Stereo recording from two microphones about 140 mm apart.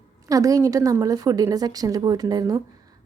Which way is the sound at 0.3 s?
25° right (ahead or behind).